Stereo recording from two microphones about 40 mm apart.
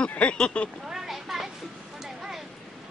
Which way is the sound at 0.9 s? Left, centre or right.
Centre.